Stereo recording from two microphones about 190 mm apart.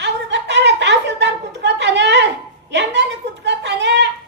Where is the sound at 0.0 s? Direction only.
65° right (ahead or behind).